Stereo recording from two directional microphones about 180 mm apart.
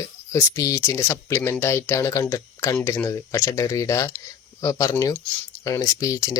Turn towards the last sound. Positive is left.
turn(degrees=20)  # may be behind; listen again after turning